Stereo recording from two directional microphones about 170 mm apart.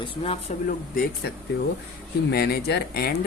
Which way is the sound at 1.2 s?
75° left (ahead or behind).